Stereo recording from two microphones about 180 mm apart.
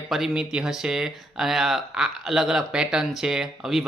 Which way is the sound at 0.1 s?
Centre (ahead or behind).